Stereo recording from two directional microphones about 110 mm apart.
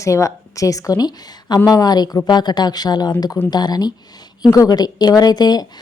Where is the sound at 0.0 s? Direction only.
30° left (ahead or behind).